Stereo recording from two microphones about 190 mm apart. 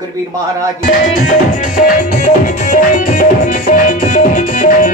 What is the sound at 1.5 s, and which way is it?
Music, 45° left (ahead or behind).